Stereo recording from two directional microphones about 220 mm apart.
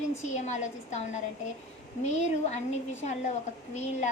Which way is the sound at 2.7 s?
30° left (ahead or behind).